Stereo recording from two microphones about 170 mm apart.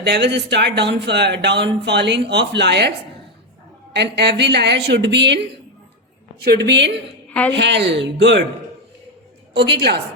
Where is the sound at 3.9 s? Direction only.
80° right.